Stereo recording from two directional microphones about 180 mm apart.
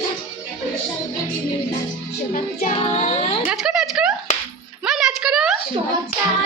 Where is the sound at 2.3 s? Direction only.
45° left (ahead or behind).